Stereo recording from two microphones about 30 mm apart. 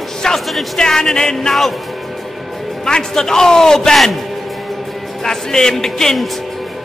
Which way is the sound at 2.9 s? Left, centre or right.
Left.